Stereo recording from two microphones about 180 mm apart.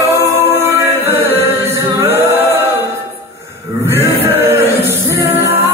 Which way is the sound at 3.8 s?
10° right (ahead or behind).